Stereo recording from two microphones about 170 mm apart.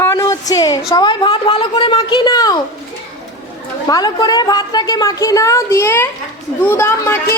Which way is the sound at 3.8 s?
25° left (ahead or behind).